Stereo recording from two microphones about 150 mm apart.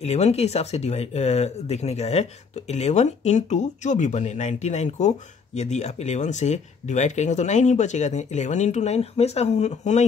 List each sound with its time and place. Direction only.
0.0 s speech: 45° left (ahead or behind)